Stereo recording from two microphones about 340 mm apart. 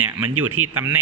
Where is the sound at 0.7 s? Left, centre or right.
Centre.